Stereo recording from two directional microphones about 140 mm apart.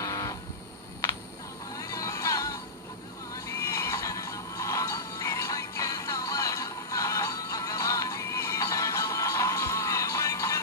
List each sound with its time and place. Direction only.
0.0 s train: 25° left (ahead or behind)
1.8 s synthetic singing: 25° left (ahead or behind)
3.4 s neigh: 20° left (ahead or behind)